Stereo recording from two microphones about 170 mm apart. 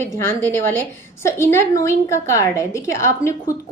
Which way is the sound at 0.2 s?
15° left (ahead or behind).